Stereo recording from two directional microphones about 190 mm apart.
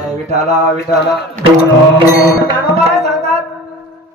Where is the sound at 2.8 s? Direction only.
35° right (ahead or behind).